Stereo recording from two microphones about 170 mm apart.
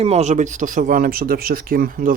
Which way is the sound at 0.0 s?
40° right (ahead or behind).